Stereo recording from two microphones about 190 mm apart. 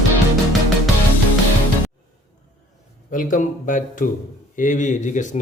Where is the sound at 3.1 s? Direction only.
45° left (ahead or behind).